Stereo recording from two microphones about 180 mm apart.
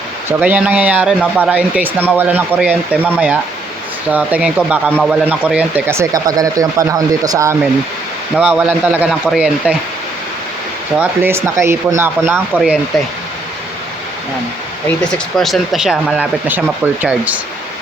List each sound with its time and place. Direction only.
0.3 s speech: 10° right (ahead or behind)
8.4 s speech: 5° right (ahead or behind)
10.9 s speech: 10° right (ahead or behind)
15.4 s speech: centre (ahead or behind)